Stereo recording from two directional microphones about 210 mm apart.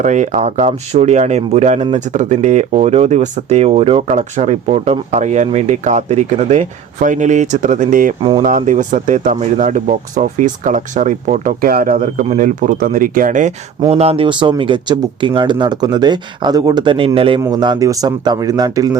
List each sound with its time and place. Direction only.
0.0 s speech: 35° right (ahead or behind)
8.2 s speech: 25° right (ahead or behind)
8.4 s speech: 40° right (ahead or behind); by 18.9 s 15° right (ahead or behind)